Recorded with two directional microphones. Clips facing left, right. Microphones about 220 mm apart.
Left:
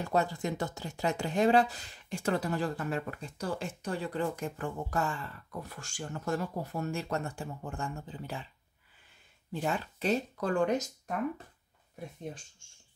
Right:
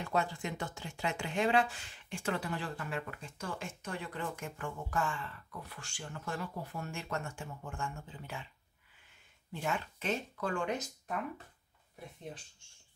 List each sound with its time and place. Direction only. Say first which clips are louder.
0.0 s speech: left 4 dB; 40° left (ahead or behind)
9.5 s speech: left 4 dB; 35° left (ahead or behind)